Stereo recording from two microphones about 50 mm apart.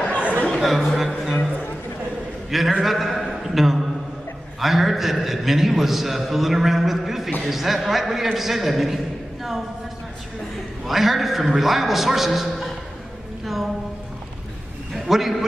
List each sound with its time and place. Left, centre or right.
0.2 s chatter: right
0.6 s a man's voice: centre
2.8 s a man's voice: centre
10.9 s a man's voice: centre
15.0 s a man's voice: centre